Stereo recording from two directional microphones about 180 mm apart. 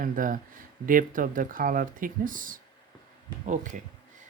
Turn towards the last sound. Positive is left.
turn(degrees=-45)  # may be behind; listen again after turning